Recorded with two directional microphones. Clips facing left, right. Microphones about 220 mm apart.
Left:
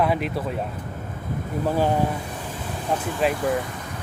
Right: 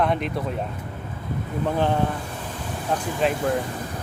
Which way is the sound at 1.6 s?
10° left (ahead or behind).